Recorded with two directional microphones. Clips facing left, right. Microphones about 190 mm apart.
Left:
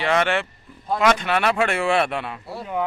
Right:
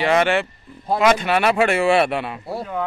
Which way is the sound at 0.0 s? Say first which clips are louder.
Right 3 dB; 10° right (ahead or behind).